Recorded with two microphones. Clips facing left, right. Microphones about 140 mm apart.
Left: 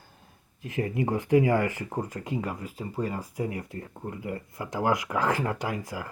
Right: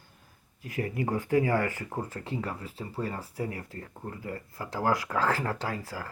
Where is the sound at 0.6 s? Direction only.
25° left (ahead or behind).